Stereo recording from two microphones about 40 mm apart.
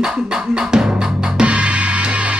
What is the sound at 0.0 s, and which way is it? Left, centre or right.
Music, centre.